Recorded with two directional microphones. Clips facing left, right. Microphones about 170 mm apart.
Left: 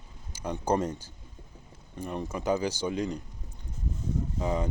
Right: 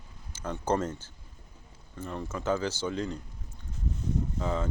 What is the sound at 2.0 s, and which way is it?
Speech, 15° left (ahead or behind).